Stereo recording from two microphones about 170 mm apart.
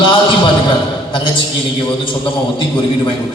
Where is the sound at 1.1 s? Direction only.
30° left (ahead or behind).